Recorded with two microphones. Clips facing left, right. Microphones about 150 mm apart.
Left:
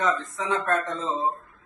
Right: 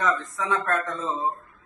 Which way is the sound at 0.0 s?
20° left (ahead or behind).